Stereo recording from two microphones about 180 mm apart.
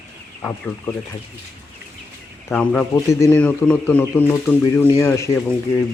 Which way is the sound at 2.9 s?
20° left (ahead or behind).